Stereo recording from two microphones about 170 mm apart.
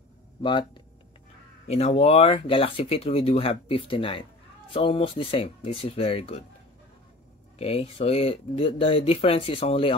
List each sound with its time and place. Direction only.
0.4 s speech: 25° left (ahead or behind)
1.7 s speech: 40° left (ahead or behind)
7.5 s speech: 35° left (ahead or behind)